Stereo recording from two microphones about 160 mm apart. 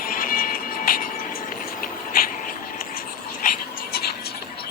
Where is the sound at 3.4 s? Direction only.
75° left (ahead or behind).